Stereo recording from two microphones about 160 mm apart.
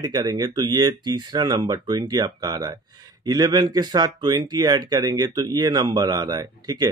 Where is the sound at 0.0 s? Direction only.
25° right (ahead or behind).